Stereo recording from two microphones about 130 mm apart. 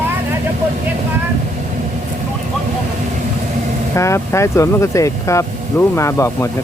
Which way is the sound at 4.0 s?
20° left (ahead or behind).